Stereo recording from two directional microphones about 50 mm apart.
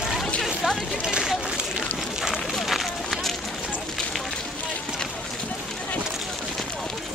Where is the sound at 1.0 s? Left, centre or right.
Centre.